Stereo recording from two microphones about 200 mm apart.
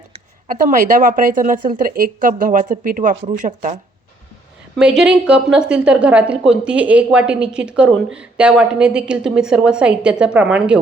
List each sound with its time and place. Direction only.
0.4 s speech: 40° right (ahead or behind)
4.8 s a woman's voice: 5° right (ahead or behind)